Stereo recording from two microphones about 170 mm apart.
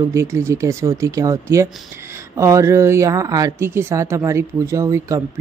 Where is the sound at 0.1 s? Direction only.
15° right (ahead or behind).